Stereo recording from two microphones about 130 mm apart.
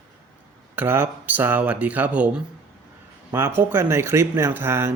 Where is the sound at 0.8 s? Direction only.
15° right (ahead or behind).